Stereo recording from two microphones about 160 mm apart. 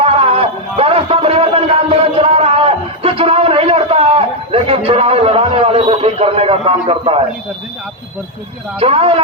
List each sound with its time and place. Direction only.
0.0 s music: 35° right (ahead or behind)
8.8 s a man's voice: 35° right (ahead or behind)